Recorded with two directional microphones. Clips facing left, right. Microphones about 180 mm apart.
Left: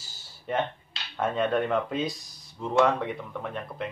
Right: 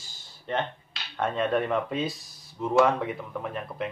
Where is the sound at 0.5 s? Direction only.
5° left (ahead or behind).